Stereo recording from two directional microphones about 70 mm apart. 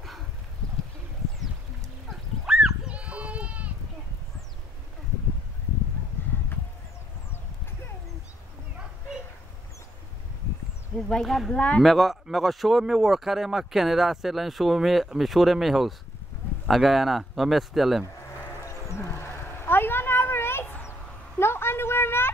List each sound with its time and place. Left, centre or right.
2.4 s goat: centre
11.0 s speech: centre
18.6 s a sound: left